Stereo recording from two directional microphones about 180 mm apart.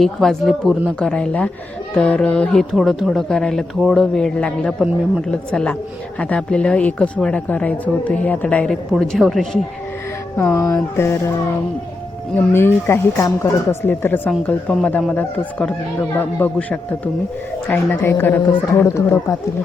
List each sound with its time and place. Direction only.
0.0 s speech: centre (ahead or behind)
10.3 s speech: 15° left (ahead or behind)